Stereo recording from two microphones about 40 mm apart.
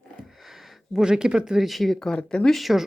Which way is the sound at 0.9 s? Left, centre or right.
Centre.